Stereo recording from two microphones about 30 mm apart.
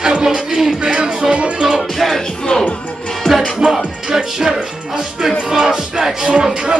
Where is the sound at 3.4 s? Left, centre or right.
Centre.